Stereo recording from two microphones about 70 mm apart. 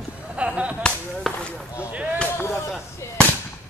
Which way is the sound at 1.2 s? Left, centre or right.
Centre.